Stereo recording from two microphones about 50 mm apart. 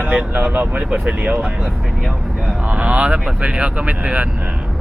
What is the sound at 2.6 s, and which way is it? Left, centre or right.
Speech, right.